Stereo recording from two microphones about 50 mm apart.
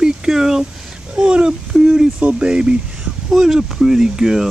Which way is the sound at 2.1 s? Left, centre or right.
Right.